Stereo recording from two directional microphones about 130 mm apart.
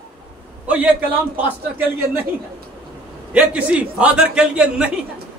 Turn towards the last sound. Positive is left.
turn(degrees=-5)  # may be behind; listen again after turning